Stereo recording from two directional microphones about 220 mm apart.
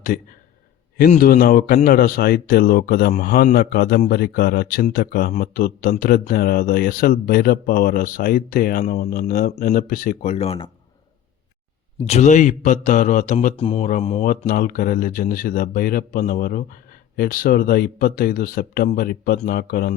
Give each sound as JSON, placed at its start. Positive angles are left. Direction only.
{"t": 0.9, "sound": "speech", "side_deg": 40}
{"t": 11.9, "sound": "speech", "side_deg": 30}